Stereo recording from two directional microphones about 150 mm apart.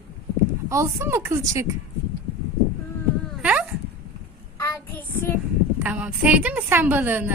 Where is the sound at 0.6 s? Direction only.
20° right (ahead or behind).